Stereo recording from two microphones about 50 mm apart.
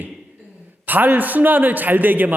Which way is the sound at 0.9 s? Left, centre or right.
Right.